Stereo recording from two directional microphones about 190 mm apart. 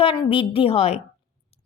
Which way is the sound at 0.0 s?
30° left (ahead or behind).